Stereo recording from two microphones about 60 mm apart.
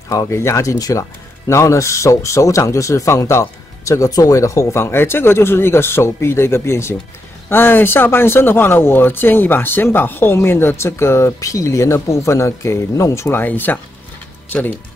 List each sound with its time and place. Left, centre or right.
0.3 s speech: left
1.5 s speech: left
4.7 s speech: left
7.4 s speech: left
11.3 s speech: left
13.3 s speech: left